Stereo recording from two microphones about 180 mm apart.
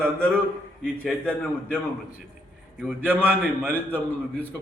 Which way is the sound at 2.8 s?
10° right (ahead or behind).